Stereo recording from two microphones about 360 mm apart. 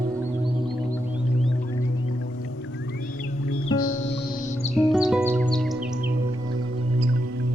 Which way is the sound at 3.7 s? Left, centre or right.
Centre.